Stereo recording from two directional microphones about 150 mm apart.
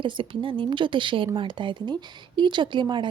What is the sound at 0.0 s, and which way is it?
A woman's voice, 35° right (ahead or behind).